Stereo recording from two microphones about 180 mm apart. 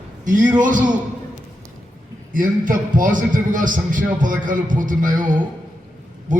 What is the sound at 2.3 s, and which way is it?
A man's voice, 50° right (ahead or behind).